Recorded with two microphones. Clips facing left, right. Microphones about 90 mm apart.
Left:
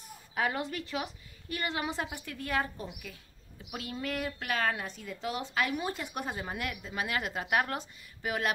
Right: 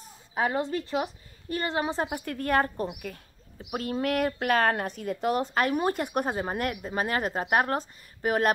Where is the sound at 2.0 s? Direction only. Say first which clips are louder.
Right 8 dB; 50° right (ahead or behind).